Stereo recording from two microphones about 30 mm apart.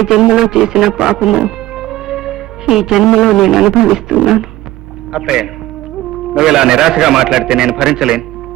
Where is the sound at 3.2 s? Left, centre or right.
Centre.